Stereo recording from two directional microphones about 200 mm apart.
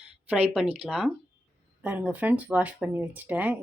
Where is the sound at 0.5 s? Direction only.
Centre (ahead or behind).